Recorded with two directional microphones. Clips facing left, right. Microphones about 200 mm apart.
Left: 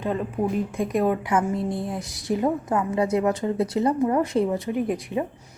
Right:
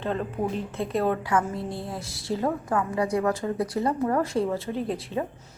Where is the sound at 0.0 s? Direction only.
10° left (ahead or behind).